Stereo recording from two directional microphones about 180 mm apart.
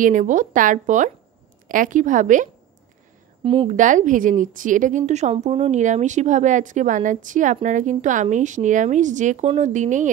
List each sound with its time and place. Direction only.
0.0 s a woman's voice: 45° right (ahead or behind)
3.4 s a woman's voice: 30° right (ahead or behind)
3.7 s a woman's voice: 45° right (ahead or behind)